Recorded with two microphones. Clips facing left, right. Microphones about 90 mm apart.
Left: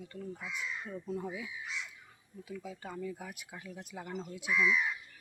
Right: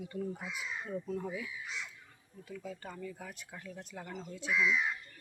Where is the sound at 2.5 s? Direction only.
5° left (ahead or behind).